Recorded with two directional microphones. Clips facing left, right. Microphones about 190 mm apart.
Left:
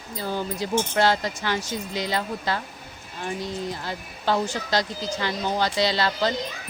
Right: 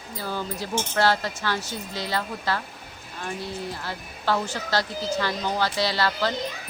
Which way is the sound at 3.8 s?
20° left (ahead or behind).